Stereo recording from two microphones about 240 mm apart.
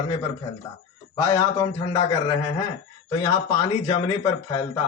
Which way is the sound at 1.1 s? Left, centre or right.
Centre.